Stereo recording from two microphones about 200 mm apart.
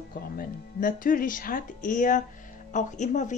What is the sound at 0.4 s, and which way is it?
A woman's voice, 45° left (ahead or behind).